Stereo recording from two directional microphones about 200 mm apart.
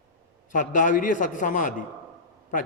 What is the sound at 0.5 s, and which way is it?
A man's voice, 40° left (ahead or behind).